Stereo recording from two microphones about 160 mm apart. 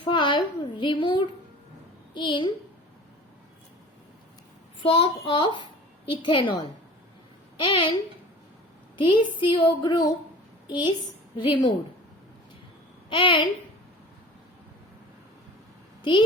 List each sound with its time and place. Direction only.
0.0 s a sound: 30° left (ahead or behind)
2.1 s a child's voice: 30° left (ahead or behind)
4.8 s a child's voice: 35° left (ahead or behind)
9.0 s a woman's voice: 30° left (ahead or behind)
13.1 s a child's voice: 30° left (ahead or behind)